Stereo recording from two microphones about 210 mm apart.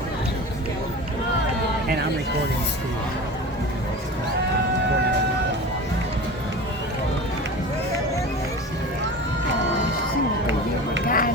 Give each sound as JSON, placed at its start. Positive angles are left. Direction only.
{"t": 11.0, "sound": "run", "side_deg": 40}